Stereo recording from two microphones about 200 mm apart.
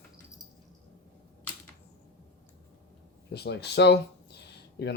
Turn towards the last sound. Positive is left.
turn(degrees=55)  # may be behind; listen again after turning